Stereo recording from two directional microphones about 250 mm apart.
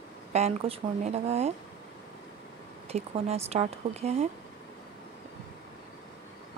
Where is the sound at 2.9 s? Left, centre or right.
Right.